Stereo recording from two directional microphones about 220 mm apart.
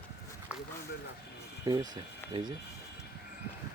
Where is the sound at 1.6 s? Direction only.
15° right (ahead or behind).